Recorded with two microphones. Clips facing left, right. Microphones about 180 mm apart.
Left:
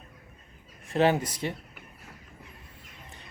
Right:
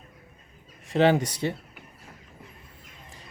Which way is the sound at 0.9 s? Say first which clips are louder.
Right 3 dB; 30° right (ahead or behind).